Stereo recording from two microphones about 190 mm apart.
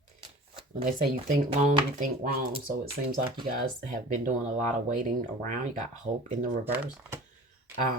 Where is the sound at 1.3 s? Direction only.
40° right (ahead or behind).